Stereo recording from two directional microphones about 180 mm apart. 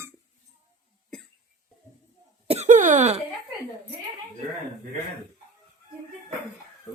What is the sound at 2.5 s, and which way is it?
Cough, 40° right (ahead or behind).